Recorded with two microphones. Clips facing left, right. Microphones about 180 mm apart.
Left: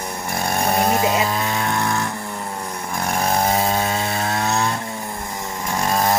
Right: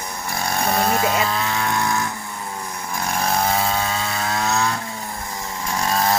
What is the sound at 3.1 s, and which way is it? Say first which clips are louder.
Chainsaw: left 2 dB; 40° left (ahead or behind).